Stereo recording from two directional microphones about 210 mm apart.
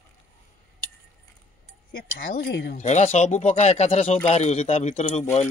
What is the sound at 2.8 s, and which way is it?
Speech, 30° left (ahead or behind).